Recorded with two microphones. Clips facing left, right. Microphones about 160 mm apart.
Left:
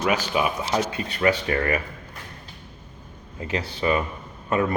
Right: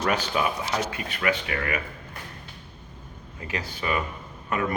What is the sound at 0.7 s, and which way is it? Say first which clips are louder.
Speech: left 4 dB; 30° left (ahead or behind).